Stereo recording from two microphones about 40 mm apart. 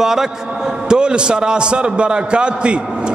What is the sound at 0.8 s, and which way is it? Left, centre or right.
A man's voice, right.